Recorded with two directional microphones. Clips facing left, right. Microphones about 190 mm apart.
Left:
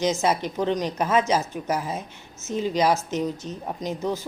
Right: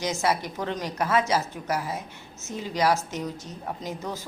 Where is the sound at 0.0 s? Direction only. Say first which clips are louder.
Left 4 dB; 20° left (ahead or behind).